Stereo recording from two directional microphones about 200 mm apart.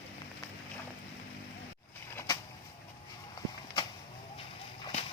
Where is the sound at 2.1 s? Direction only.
15° left (ahead or behind).